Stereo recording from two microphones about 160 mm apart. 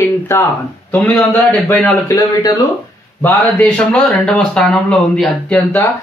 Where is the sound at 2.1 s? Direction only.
20° left (ahead or behind).